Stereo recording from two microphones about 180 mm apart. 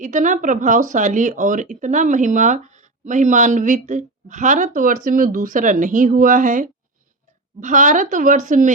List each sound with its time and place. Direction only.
0.0 s speech: 45° right (ahead or behind)